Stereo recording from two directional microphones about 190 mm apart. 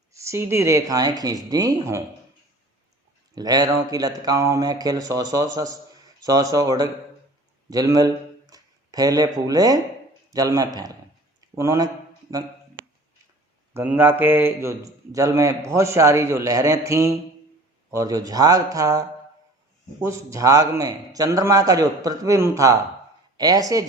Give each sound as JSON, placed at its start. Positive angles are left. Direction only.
{"t": 0.1, "sound": "a man's voice", "side_deg": -15}
{"t": 3.3, "sound": "speech", "side_deg": -20}
{"t": 7.7, "sound": "a sound", "side_deg": -20}
{"t": 9.5, "sound": "speech", "side_deg": -20}
{"t": 11.3, "sound": "a sound", "side_deg": -15}
{"t": 12.3, "sound": "a man's voice", "side_deg": -15}
{"t": 13.7, "sound": "a man's voice", "side_deg": -10}